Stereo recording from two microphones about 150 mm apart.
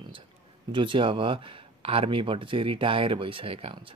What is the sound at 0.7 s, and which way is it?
Speech, 35° right (ahead or behind).